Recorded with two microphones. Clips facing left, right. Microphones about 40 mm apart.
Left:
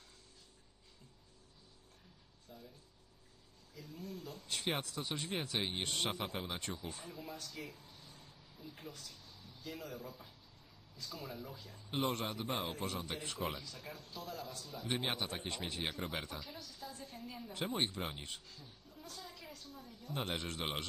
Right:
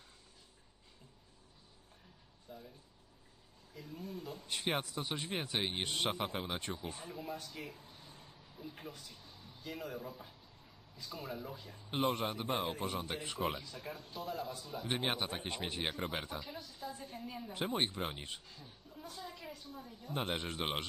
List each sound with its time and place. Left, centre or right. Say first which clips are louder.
2.5 s speech: right 4 dB; centre
3.8 s speech: right 2 dB; centre
6.6 s speech: right 2 dB; right
12.5 s a man's voice: right 4 dB; centre
12.7 s a woman's voice: right 2 dB; centre